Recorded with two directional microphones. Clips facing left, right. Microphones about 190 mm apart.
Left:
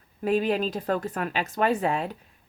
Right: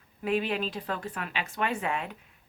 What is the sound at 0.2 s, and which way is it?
Speech, 40° left (ahead or behind).